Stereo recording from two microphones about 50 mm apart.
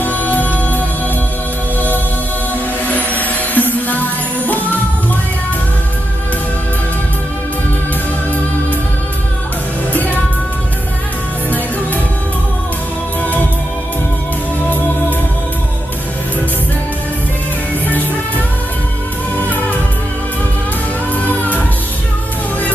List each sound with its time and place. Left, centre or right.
0.0 s music: left
2.5 s music: left
17.8 s music: left
21.1 s music: left